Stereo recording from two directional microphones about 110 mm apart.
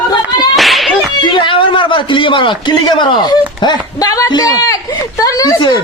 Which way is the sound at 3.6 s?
40° left (ahead or behind).